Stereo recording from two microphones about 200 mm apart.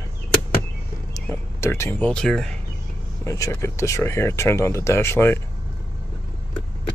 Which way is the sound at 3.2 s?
15° left (ahead or behind).